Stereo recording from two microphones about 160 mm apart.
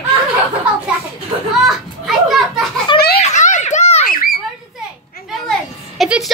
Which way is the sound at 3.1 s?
45° left (ahead or behind).